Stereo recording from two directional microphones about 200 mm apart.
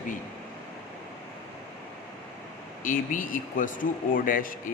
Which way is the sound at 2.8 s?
40° left (ahead or behind).